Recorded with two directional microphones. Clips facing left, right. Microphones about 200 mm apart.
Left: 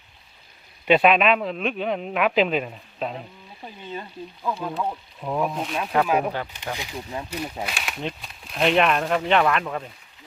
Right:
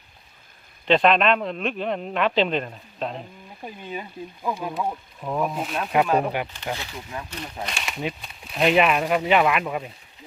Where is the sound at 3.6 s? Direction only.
15° right (ahead or behind).